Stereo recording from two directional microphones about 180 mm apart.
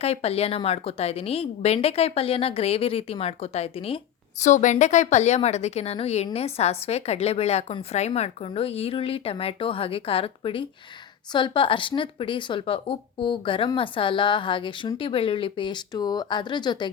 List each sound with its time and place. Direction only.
0.0 s a woman's voice: 35° left (ahead or behind)